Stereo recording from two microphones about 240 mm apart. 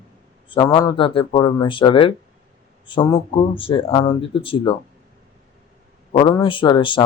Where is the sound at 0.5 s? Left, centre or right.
Centre.